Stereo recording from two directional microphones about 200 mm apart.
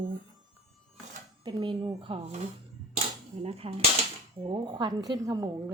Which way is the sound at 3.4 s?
30° right (ahead or behind).